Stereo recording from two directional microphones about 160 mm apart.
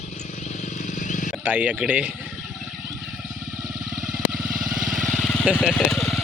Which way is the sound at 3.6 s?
5° right (ahead or behind).